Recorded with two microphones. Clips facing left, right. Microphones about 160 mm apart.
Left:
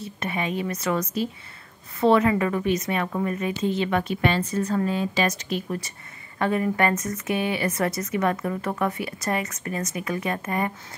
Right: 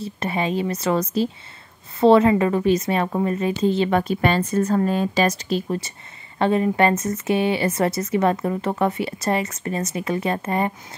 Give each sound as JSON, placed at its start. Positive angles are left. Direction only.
{"t": 0.0, "sound": "a woman's voice", "side_deg": -30}
{"t": 5.2, "sound": "speech", "side_deg": -35}